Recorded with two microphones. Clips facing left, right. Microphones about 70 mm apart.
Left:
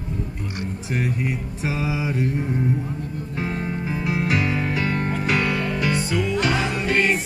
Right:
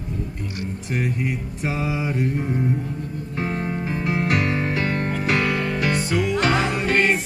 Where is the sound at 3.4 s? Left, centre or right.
Centre.